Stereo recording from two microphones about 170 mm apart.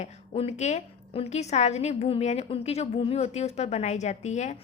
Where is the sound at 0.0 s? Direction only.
40° left (ahead or behind).